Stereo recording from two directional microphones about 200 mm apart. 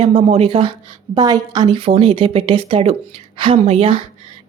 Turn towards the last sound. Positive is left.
turn(degrees=-30)  # may be behind; listen again after turning